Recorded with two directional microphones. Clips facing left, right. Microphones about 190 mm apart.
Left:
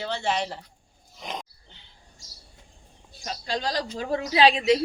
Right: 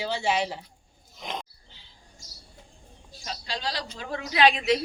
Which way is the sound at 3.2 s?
50° left (ahead or behind).